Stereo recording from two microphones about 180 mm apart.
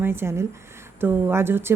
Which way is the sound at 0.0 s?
15° right (ahead or behind).